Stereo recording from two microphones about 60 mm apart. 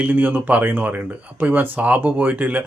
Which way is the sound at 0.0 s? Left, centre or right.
Right.